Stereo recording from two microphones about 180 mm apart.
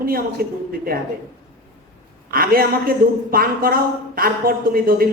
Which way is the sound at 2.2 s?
55° right (ahead or behind).